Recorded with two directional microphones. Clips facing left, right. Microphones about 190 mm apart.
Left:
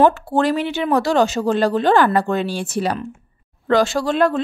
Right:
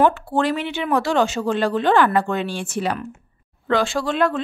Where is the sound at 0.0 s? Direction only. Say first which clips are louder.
Left 3 dB; 40° left (ahead or behind).